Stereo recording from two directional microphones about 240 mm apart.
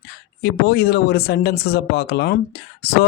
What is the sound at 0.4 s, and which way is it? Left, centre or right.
Speech, left.